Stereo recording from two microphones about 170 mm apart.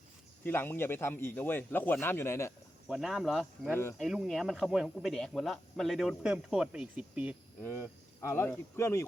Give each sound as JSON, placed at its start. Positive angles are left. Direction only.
{"t": 0.4, "sound": "a man's voice", "side_deg": 10}
{"t": 2.8, "sound": "speech", "side_deg": -5}
{"t": 7.6, "sound": "a man's voice", "side_deg": 15}